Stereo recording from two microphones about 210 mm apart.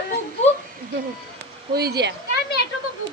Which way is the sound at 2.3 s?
50° left (ahead or behind).